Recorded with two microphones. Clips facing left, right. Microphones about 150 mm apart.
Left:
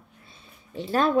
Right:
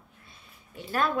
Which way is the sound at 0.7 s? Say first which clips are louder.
Left 5 dB; 30° left (ahead or behind).